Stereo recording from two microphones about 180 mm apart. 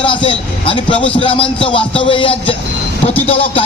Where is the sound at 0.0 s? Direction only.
30° left (ahead or behind).